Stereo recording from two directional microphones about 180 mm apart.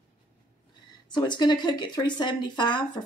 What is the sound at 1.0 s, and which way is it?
Speech, 25° left (ahead or behind).